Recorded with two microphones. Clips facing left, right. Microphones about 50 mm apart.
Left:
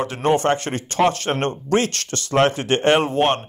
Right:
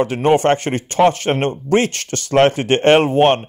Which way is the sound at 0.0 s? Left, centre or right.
Right.